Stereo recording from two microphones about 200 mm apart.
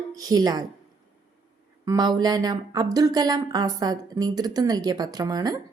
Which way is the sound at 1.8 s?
20° right (ahead or behind).